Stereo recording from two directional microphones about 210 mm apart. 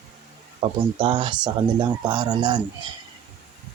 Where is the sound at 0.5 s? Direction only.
25° right (ahead or behind).